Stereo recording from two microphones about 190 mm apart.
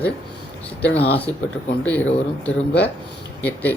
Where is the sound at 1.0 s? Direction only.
30° left (ahead or behind).